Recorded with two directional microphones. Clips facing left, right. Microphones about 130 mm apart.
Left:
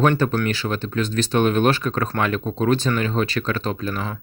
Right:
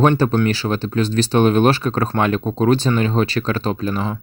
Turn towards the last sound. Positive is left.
turn(degrees=-25)  # may be behind; listen again after turning